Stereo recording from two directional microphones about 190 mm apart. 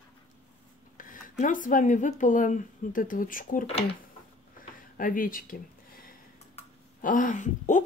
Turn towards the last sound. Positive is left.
turn(degrees=40)  # may be behind; listen again after turning